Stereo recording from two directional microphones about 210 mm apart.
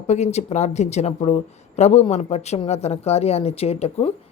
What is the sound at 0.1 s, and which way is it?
Speech, 30° left (ahead or behind).